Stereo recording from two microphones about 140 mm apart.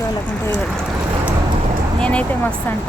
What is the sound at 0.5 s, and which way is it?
Speech, 5° left (ahead or behind).